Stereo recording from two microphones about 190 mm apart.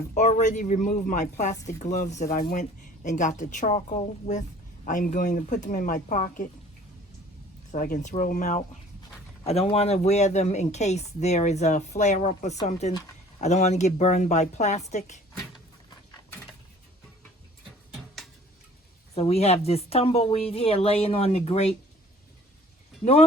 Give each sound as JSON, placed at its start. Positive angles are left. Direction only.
{"t": 0.1, "sound": "speech", "side_deg": 40}
{"t": 7.7, "sound": "speech", "side_deg": 45}
{"t": 19.1, "sound": "speech", "side_deg": 35}